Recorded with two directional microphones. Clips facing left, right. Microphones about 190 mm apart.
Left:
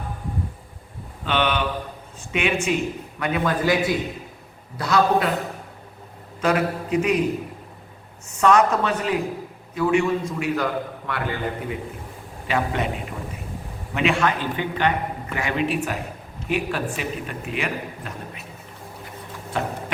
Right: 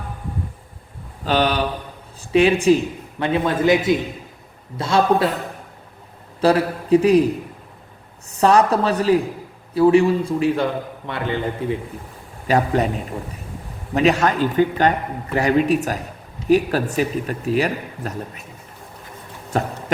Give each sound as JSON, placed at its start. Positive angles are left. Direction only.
{"t": 1.2, "sound": "a man's voice", "side_deg": -35}
{"t": 6.4, "sound": "a man's voice", "side_deg": -35}
{"t": 8.3, "sound": "a man's voice", "side_deg": -35}
{"t": 12.5, "sound": "a man's voice", "side_deg": -40}
{"t": 13.9, "sound": "a man's voice", "side_deg": -40}
{"t": 19.5, "sound": "a man's voice", "side_deg": -40}